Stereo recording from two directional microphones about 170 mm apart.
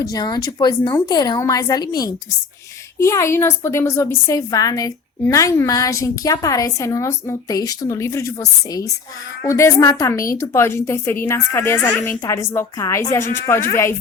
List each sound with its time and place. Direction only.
0.0 s a woman's voice: 25° left (ahead or behind)